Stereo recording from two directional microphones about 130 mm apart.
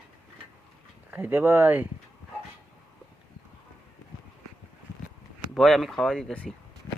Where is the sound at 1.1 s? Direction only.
15° right (ahead or behind).